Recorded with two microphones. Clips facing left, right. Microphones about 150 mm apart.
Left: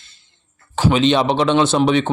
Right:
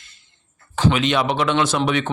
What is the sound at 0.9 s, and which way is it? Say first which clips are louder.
Speech: left 4 dB; 30° left (ahead or behind).